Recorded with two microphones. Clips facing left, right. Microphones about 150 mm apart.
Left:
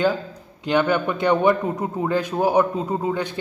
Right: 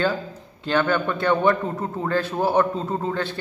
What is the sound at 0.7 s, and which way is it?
A man's voice, 15° left (ahead or behind).